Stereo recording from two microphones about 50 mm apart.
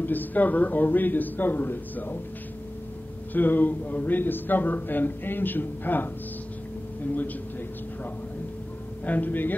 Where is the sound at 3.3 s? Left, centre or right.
Left.